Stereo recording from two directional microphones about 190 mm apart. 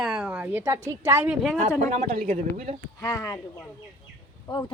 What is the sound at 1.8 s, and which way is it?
Speech, 40° right (ahead or behind).